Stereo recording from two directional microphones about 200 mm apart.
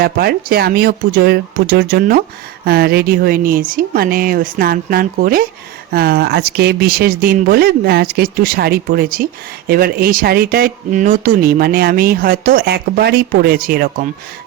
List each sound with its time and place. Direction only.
0.0 s speech: 50° right (ahead or behind)